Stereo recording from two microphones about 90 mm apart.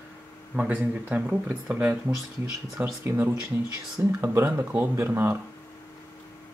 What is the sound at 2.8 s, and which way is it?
Speech, 25° right (ahead or behind).